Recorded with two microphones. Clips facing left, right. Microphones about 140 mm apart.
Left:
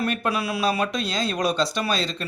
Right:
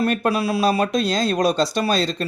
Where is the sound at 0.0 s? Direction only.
35° right (ahead or behind).